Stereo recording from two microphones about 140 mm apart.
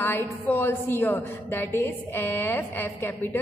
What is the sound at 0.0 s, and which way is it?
A woman's voice, 15° left (ahead or behind).